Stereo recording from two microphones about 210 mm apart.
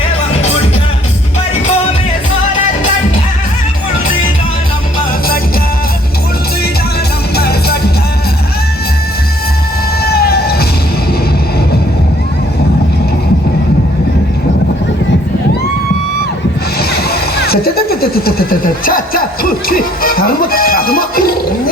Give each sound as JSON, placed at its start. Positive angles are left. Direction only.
{"t": 7.3, "sound": "music", "side_deg": 50}
{"t": 10.0, "sound": "vehicle", "side_deg": 45}
{"t": 16.9, "sound": "speech", "side_deg": 50}